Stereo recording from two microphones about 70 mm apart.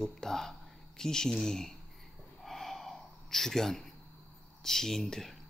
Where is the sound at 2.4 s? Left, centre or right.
Centre.